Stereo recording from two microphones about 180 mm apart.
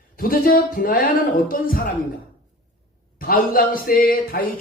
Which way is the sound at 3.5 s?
50° left (ahead or behind).